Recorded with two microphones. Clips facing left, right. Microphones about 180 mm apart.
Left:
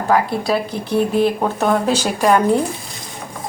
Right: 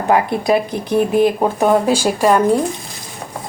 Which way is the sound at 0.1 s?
20° right (ahead or behind).